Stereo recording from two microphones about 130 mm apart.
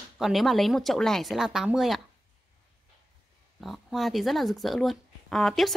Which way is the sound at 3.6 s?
Centre (ahead or behind).